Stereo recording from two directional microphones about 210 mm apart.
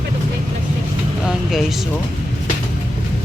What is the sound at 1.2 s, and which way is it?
Vehicle, centre (ahead or behind).